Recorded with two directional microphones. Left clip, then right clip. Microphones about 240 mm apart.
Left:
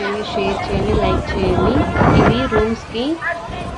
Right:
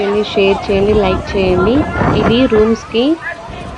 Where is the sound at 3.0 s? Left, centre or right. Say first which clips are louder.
Right 4 dB; centre.